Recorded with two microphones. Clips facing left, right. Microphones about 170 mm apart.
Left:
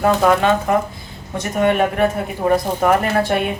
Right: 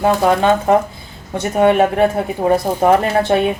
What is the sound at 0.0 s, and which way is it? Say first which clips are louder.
Speech: right 1 dB; 25° right (ahead or behind).